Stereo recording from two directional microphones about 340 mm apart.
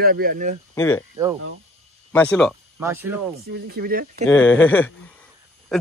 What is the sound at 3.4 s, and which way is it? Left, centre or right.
Speech, right.